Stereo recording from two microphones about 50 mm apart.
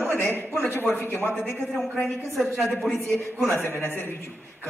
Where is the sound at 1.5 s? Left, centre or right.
Centre.